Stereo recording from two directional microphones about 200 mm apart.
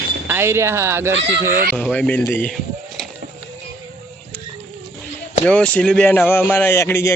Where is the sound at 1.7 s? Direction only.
5° left (ahead or behind).